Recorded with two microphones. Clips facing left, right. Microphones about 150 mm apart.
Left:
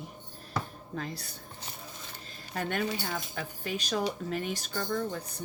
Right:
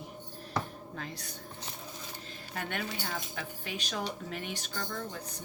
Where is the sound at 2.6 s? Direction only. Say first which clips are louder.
Left 5 dB; 40° left (ahead or behind).